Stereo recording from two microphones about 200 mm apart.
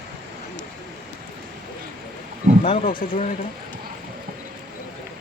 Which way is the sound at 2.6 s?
30° left (ahead or behind).